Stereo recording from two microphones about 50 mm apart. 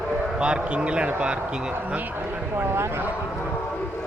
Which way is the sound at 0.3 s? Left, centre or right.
Centre.